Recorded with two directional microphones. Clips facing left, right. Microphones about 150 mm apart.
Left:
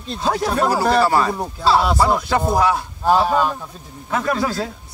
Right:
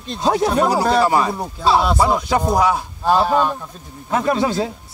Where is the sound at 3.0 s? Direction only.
Centre (ahead or behind).